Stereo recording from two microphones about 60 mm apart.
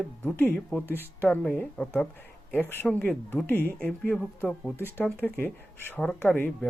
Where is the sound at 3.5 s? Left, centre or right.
Left.